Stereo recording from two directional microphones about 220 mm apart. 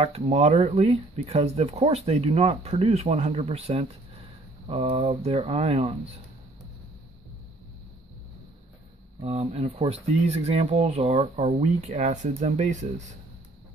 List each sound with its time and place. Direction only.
0.0 s speech: 30° right (ahead or behind)
9.2 s speech: 25° right (ahead or behind)